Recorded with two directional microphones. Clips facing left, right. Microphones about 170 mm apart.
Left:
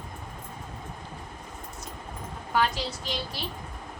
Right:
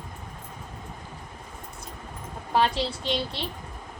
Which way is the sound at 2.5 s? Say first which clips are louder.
Right 3 dB; 30° right (ahead or behind).